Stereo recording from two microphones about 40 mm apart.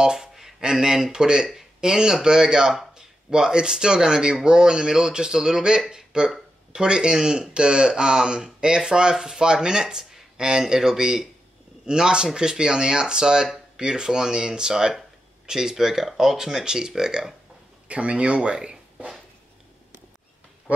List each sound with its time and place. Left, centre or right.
0.0 s speech: centre
0.3 s a sound: centre
0.6 s speech: centre
17.8 s speech: right